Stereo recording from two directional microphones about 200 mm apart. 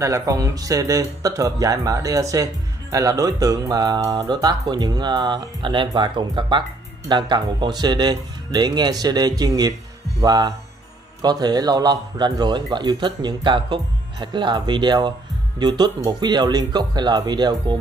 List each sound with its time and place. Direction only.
0.0 s speech: 15° right (ahead or behind)